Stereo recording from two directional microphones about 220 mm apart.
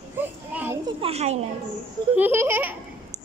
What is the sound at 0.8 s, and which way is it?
Speech, 25° right (ahead or behind).